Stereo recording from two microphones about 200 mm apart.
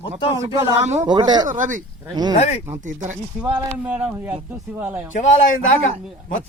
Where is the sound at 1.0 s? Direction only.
20° right (ahead or behind).